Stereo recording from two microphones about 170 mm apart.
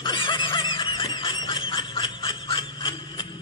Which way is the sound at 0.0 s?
30° left (ahead or behind).